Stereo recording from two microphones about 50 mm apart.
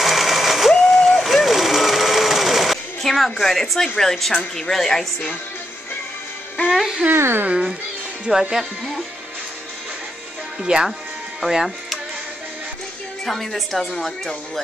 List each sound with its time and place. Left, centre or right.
0.0 s a sound: centre
0.8 s vehicle: centre
1.2 s a sound: centre
3.9 s a woman's voice: centre
7.1 s a woman's voice: right
8.3 s speech: centre
10.6 s speech: centre
11.4 s speech: centre
13.2 s a woman's voice: centre